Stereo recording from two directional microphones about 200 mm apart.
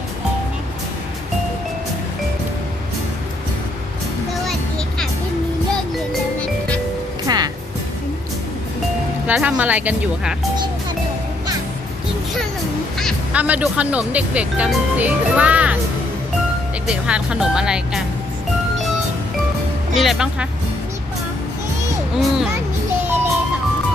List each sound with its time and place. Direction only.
7.3 s music: 20° right (ahead or behind)
9.2 s speech: 5° right (ahead or behind)
13.0 s speech: centre (ahead or behind)
16.8 s speech: 5° right (ahead or behind)
19.9 s speech: centre (ahead or behind)
23.0 s music: 10° right (ahead or behind)